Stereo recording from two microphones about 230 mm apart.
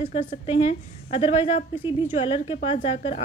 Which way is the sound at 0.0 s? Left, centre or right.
Left.